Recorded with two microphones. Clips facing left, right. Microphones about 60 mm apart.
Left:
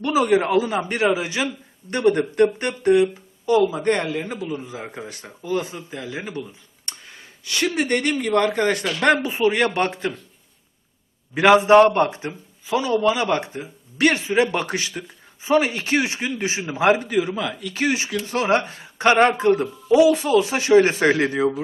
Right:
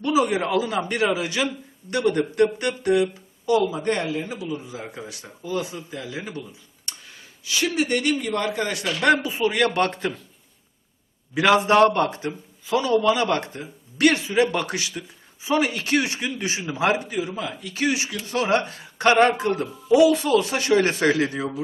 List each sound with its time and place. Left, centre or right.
0.0 s speech: left
3.8 s speech: left
7.4 s speech: left
9.9 s speech: centre
11.3 s speech: left
12.7 s a man's voice: centre
14.0 s speech: left
17.1 s a man's voice: left
17.7 s speech: left
21.0 s speech: left